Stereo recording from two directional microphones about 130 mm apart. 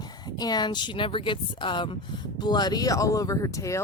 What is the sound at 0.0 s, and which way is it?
A woman's voice, 30° left (ahead or behind).